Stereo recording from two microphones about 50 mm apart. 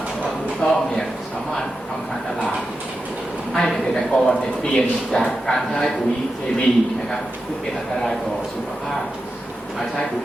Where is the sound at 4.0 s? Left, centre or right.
Centre.